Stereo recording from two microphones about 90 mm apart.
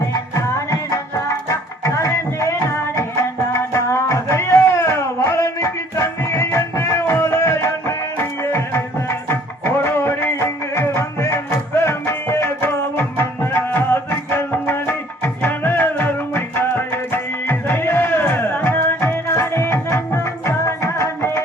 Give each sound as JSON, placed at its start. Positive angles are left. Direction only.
{"t": 0.1, "sound": "music", "side_deg": 40}